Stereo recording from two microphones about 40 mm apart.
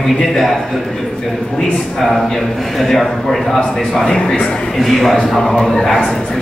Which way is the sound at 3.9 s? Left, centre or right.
Centre.